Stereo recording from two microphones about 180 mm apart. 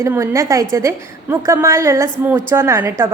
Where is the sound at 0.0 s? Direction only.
15° right (ahead or behind).